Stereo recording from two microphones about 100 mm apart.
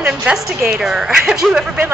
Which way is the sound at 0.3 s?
5° right (ahead or behind).